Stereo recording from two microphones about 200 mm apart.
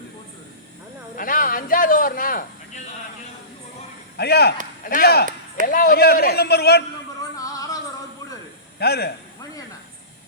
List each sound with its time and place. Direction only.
1.1 s a man's voice: 45° left (ahead or behind)
4.2 s a man's voice: 55° left (ahead or behind)
7.3 s music: 15° left (ahead or behind)
8.8 s a man's voice: 55° left (ahead or behind)